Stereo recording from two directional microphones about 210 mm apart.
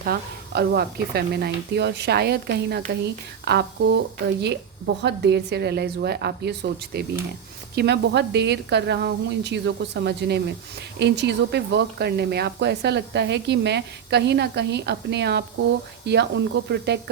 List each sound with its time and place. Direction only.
0.0 s speech: 45° right (ahead or behind)